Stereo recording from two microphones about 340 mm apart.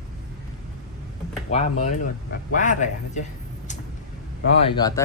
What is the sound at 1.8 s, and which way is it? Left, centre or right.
Speech, left.